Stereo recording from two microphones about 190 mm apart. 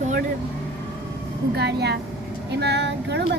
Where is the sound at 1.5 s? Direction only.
60° right (ahead or behind).